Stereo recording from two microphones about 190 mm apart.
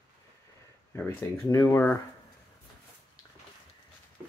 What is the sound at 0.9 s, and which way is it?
Speech, 15° left (ahead or behind).